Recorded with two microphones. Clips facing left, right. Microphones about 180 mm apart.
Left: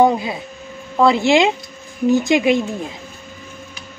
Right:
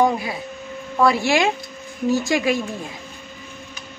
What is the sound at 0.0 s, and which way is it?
Speech, 20° left (ahead or behind).